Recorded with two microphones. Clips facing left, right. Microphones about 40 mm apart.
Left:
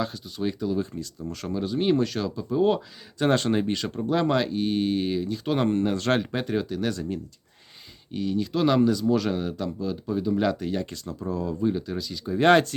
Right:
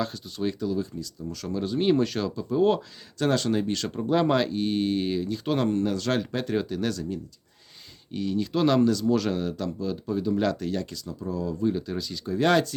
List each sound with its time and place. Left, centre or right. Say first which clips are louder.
0.0 s speech: even; centre
0.8 s speech: left 1 dB; left
1.5 s speech: even; centre
3.2 s speech: left 2 dB; left
3.9 s speech: right 1 dB; centre
5.5 s speech: left 2 dB; left
6.5 s speech: even; centre
8.1 s speech: even; centre
10.8 s speech: left 2 dB; left
11.8 s speech: even; centre
12.4 s speech: left 4 dB; left